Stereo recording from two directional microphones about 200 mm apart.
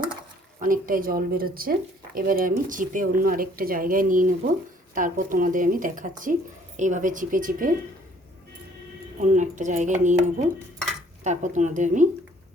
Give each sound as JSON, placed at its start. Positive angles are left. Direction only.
{"t": 0.6, "sound": "speech", "side_deg": -45}
{"t": 9.2, "sound": "speech", "side_deg": -35}